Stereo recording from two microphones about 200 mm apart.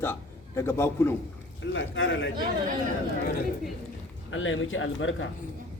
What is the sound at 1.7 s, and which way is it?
Speech, 70° left (ahead or behind).